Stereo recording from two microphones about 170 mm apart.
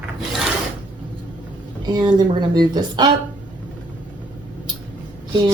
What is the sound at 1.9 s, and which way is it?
Speech, 25° right (ahead or behind).